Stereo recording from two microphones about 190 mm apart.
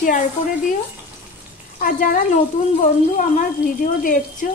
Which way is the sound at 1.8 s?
50° left (ahead or behind).